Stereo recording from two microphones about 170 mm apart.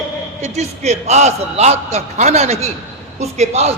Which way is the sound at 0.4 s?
40° right (ahead or behind).